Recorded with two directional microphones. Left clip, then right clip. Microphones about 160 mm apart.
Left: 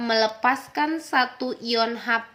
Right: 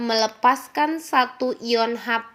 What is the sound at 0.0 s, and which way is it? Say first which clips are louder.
A woman's voice: right 2 dB; 15° right (ahead or behind).